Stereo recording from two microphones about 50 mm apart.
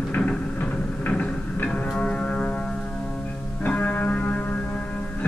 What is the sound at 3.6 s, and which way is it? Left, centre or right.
Music, left.